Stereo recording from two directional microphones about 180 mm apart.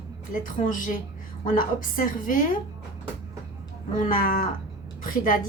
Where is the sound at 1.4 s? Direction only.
45° left (ahead or behind).